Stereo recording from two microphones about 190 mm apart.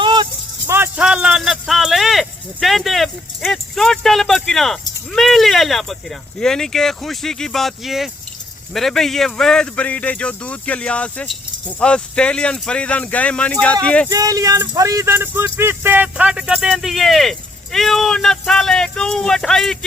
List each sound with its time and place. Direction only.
0.0 s rattle: 25° right (ahead or behind)
0.7 s speech: 10° right (ahead or behind); by 14.1 s 5° left (ahead or behind)
14.1 s speech: 20° right (ahead or behind); by 19.8 s centre (ahead or behind)